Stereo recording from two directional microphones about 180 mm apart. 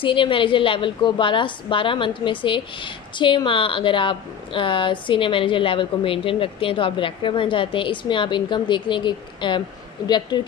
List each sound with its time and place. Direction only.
0.0 s a woman's voice: 30° left (ahead or behind)